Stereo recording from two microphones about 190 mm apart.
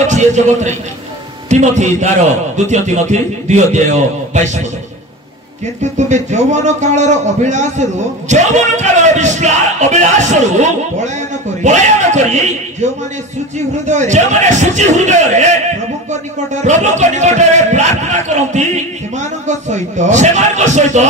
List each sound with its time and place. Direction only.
0.0 s a man's voice: 40° right (ahead or behind)
5.8 s a man's voice: 40° right (ahead or behind)
16.6 s a man's voice: 40° right (ahead or behind)